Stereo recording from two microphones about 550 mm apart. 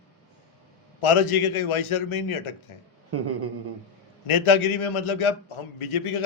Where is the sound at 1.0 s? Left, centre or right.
Left.